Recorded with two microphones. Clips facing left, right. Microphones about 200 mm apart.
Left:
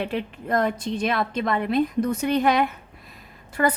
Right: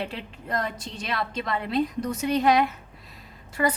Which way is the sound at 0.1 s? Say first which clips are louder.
Left 7 dB; 55° left (ahead or behind).